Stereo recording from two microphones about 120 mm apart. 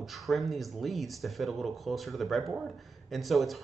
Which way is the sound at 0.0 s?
Centre (ahead or behind).